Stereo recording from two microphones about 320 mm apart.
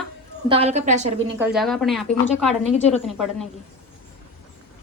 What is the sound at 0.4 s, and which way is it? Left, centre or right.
Speech, centre.